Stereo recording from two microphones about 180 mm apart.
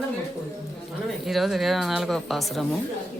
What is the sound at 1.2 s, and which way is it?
Speech, centre (ahead or behind).